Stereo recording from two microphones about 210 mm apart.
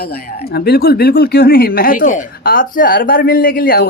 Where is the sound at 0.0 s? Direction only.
45° left (ahead or behind).